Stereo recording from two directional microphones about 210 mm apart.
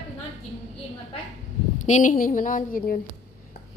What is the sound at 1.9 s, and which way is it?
A woman's voice, 35° left (ahead or behind).